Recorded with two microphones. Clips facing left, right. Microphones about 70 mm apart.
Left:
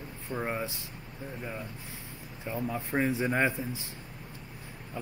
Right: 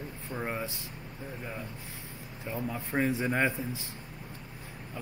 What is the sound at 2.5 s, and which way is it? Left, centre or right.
Speech, centre.